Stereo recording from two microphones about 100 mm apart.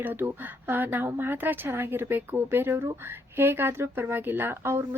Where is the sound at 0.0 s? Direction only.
20° right (ahead or behind).